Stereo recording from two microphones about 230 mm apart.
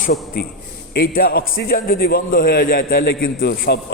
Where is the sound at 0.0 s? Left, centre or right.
Left.